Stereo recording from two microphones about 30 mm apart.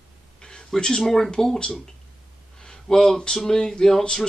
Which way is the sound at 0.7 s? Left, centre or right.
Left.